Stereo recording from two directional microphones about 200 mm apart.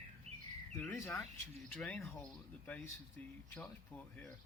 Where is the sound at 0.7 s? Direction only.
10° left (ahead or behind).